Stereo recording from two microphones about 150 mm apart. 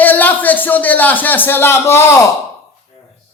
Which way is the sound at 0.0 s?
10° left (ahead or behind).